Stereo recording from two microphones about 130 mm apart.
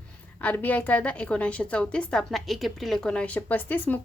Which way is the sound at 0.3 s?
15° left (ahead or behind).